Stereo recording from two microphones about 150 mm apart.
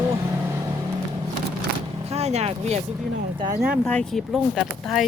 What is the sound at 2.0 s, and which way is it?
Speech, 45° right (ahead or behind).